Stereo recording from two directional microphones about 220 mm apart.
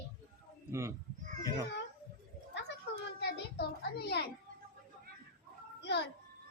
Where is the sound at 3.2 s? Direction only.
50° left (ahead or behind).